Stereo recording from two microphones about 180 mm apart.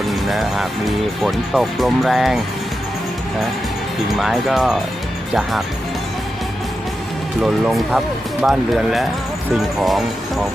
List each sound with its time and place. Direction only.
0.1 s speech: centre (ahead or behind)
4.2 s speech: centre (ahead or behind)
7.4 s speech: 5° right (ahead or behind)